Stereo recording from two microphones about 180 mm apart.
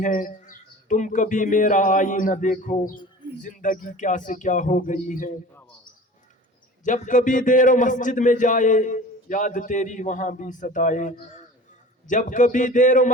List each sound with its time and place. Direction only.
0.0 s a man's voice: 50° left (ahead or behind)
6.8 s a man's voice: 45° left (ahead or behind)